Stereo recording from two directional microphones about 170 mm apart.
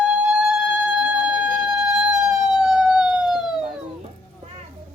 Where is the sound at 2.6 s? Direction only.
5° right (ahead or behind).